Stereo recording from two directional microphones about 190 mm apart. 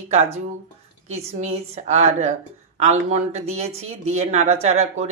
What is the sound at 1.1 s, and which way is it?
Speech, 35° right (ahead or behind).